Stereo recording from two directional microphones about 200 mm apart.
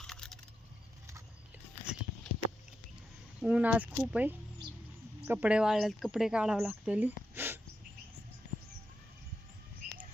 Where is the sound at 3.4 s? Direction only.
5° right (ahead or behind).